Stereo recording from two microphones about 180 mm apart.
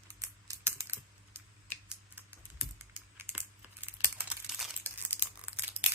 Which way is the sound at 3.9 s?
10° right (ahead or behind).